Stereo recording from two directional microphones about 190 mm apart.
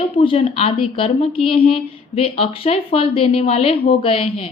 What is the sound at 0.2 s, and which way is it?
A woman's voice, 30° left (ahead or behind).